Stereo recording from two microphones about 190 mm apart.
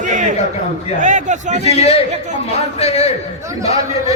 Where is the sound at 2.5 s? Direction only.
35° left (ahead or behind).